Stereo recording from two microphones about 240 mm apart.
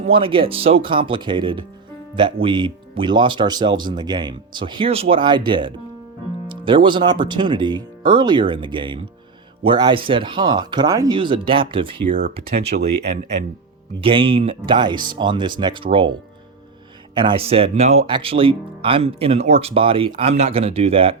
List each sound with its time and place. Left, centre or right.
0.0 s speech: right
12.0 s speech: right
14.0 s speech: right
17.2 s speech: right